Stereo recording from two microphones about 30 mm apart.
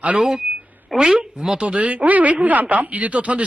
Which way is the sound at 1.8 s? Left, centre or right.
Right.